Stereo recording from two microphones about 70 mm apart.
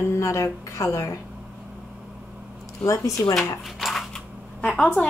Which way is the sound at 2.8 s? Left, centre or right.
Left.